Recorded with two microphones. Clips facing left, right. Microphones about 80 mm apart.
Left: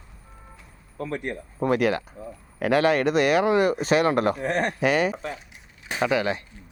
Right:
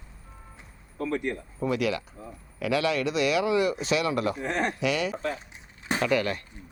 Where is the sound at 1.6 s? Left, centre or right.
Left.